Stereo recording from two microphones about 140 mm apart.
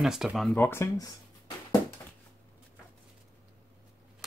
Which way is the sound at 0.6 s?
15° left (ahead or behind).